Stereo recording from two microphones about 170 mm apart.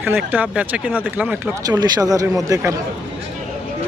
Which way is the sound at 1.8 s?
20° right (ahead or behind).